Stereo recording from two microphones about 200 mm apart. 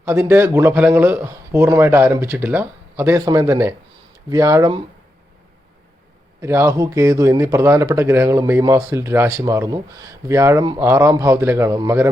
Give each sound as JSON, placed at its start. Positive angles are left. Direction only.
{"t": 0.0, "sound": "speech", "side_deg": -10}
{"t": 6.4, "sound": "speech", "side_deg": -15}